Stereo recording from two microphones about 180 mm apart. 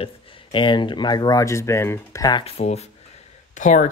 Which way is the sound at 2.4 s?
35° left (ahead or behind).